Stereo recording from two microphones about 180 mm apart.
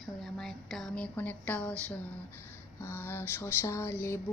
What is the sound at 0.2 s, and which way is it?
Speech, centre (ahead or behind).